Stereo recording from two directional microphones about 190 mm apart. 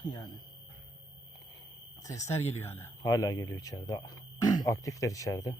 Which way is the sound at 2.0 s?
15° left (ahead or behind).